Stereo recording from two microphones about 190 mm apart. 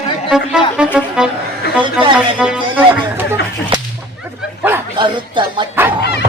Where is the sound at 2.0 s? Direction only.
5° right (ahead or behind).